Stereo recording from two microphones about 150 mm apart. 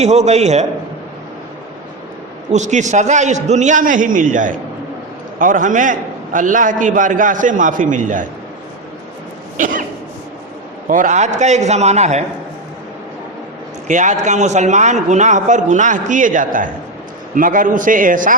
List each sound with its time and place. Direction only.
0.0 s a man's voice: 50° right (ahead or behind)
2.5 s a man's voice: 50° right (ahead or behind)
9.6 s a man's voice: 60° right (ahead or behind)
10.8 s a man's voice: 60° right (ahead or behind)
13.8 s a man's voice: 55° right (ahead or behind)